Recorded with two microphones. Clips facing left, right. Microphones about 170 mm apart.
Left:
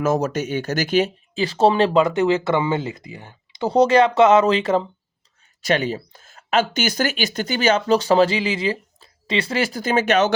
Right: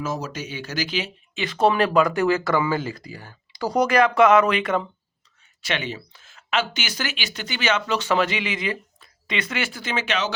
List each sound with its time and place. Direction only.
0.0 s speech: 50° left (ahead or behind); by 4.9 s 30° left (ahead or behind)
5.6 s speech: 40° left (ahead or behind)